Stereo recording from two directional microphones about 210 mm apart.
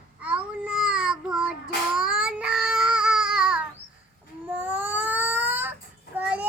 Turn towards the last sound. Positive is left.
turn(degrees=-5)  # may be behind; listen again after turning